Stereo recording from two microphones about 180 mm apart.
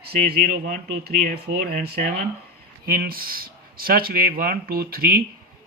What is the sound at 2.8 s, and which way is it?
Speech, 55° right (ahead or behind).